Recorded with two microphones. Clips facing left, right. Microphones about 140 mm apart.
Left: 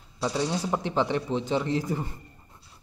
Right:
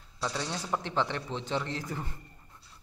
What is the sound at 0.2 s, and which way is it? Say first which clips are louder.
Speech: left 7 dB; 10° left (ahead or behind).